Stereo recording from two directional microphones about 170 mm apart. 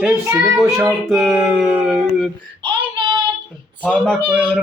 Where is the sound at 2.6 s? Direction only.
25° right (ahead or behind).